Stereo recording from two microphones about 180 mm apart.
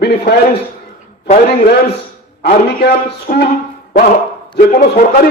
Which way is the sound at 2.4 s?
65° left (ahead or behind).